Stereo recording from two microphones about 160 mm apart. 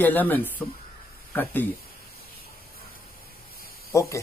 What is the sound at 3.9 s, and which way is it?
Speech, 20° left (ahead or behind).